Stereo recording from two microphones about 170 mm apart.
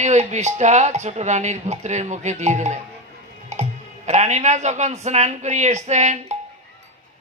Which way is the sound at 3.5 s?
40° right (ahead or behind).